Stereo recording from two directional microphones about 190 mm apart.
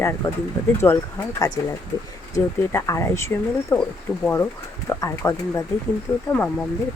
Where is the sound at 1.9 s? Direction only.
20° left (ahead or behind).